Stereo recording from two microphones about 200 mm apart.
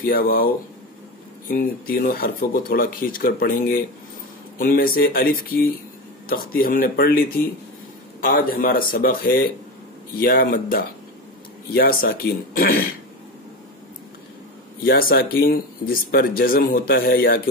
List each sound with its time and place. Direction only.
0.0 s speech: 45° left (ahead or behind)
1.5 s speech: 45° left (ahead or behind)
14.9 s speech: 50° left (ahead or behind)